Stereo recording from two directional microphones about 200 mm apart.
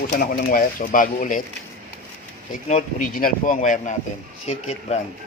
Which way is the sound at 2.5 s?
40° left (ahead or behind).